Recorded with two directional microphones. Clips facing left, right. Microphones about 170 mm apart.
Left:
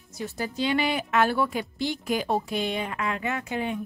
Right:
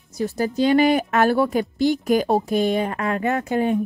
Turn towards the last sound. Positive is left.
turn(degrees=-45)  # may be behind; listen again after turning